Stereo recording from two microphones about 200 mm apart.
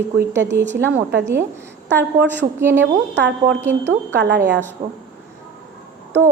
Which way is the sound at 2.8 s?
60° right (ahead or behind).